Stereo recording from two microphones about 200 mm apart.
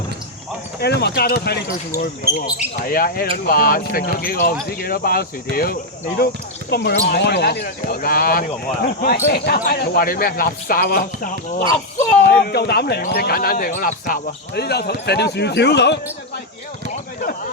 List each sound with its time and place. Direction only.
0.8 s speech: 55° left (ahead or behind)
2.3 s speech: 15° right (ahead or behind)
2.9 s speech: 50° left (ahead or behind)
16.9 s a sound: 45° left (ahead or behind)